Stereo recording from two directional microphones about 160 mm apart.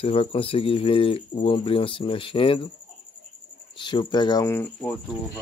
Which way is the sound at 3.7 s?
30° left (ahead or behind).